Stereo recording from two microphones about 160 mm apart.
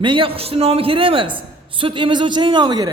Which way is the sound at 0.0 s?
30° right (ahead or behind).